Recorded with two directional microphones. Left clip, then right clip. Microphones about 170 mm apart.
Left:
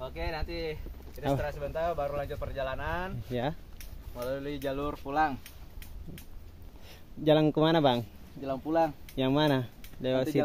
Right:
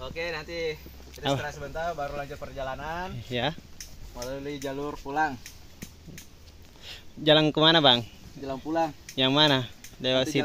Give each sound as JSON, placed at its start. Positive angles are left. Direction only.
{"t": 0.0, "sound": "speech", "side_deg": 60}
{"t": 1.4, "sound": "speech", "side_deg": 20}
{"t": 6.8, "sound": "speech", "side_deg": 5}